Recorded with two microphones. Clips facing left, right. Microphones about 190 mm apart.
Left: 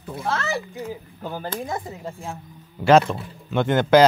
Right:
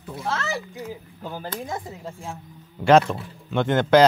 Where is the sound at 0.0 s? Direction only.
55° left (ahead or behind).